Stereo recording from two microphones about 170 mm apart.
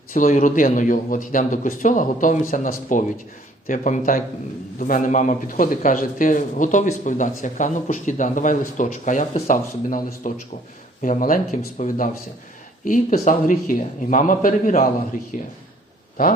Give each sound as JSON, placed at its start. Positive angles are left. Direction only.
{"t": 0.1, "sound": "a man's voice", "side_deg": 50}